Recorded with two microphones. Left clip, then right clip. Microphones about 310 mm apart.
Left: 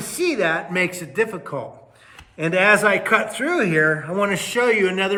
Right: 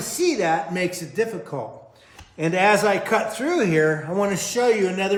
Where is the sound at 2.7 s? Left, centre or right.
Centre.